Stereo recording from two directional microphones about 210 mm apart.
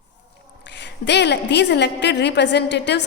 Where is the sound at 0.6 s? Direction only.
55° left (ahead or behind).